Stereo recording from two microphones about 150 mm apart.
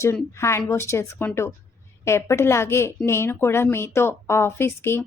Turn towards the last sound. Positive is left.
turn(degrees=15)  # may be behind; listen again after turning